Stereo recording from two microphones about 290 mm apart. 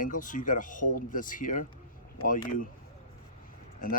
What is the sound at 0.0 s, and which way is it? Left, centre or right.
Speech, left.